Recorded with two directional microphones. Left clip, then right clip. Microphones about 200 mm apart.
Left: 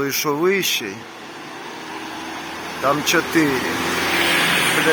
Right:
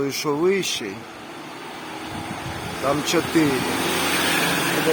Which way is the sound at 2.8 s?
5° left (ahead or behind).